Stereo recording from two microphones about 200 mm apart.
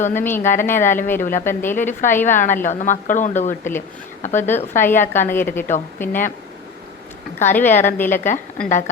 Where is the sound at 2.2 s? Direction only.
40° left (ahead or behind).